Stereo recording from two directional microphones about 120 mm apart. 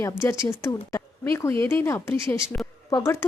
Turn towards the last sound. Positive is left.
turn(degrees=25)  # may be behind; listen again after turning